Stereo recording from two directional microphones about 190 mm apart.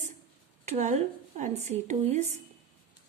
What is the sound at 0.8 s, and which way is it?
A woman's voice, 40° right (ahead or behind).